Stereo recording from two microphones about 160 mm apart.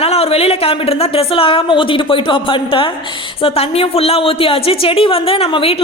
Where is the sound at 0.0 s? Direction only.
35° left (ahead or behind).